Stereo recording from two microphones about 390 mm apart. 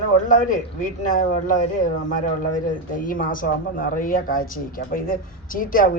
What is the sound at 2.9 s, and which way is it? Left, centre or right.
Speech, left.